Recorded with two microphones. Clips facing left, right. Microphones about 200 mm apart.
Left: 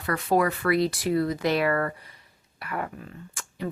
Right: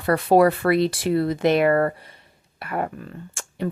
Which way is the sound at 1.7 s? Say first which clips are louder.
Right 7 dB; 35° right (ahead or behind).